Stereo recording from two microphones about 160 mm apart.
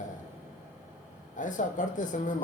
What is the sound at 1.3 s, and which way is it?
Speech, 55° left (ahead or behind).